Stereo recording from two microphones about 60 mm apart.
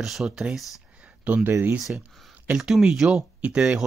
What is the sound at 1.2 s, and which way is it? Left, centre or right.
Speech, right.